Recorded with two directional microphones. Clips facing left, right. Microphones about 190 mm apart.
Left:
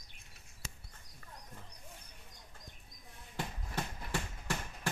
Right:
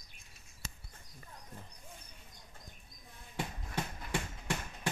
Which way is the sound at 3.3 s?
10° right (ahead or behind).